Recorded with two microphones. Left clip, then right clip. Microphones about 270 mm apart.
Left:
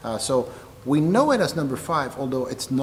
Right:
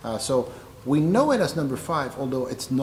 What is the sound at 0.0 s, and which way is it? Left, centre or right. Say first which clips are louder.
Speech: left 1 dB; centre.